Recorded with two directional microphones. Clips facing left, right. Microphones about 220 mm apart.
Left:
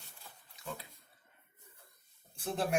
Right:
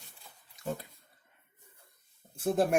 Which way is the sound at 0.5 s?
45° right (ahead or behind).